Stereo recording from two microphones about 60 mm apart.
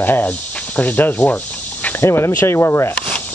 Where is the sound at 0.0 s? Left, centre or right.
Left.